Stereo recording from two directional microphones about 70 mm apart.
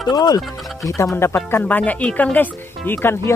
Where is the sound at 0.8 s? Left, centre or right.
Left.